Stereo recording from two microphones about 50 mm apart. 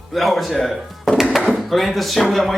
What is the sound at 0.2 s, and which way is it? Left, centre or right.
Speech, centre.